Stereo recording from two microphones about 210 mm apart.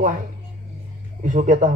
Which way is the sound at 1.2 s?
40° right (ahead or behind).